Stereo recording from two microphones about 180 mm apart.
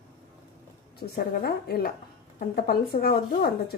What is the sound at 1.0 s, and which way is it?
Speech, 60° left (ahead or behind).